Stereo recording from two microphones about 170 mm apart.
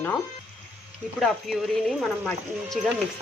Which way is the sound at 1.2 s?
Centre (ahead or behind).